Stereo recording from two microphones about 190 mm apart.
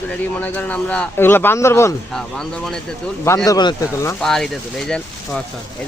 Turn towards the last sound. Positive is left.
turn(degrees=5)  # may be behind; listen again after turning